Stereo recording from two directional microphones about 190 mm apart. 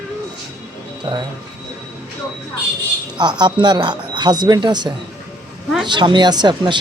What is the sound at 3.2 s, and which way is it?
Speech, 25° right (ahead or behind).